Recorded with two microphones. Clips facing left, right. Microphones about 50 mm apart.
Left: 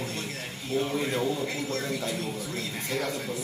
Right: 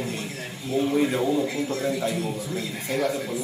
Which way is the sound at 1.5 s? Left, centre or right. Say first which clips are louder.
Right 5 dB; right.